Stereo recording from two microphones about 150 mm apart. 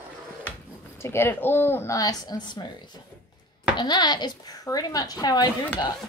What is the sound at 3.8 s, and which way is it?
A woman's voice, 30° left (ahead or behind).